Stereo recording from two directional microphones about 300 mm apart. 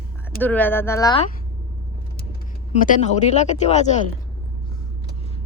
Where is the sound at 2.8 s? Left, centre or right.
Left.